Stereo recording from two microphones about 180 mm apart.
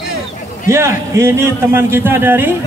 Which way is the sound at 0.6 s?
15° right (ahead or behind).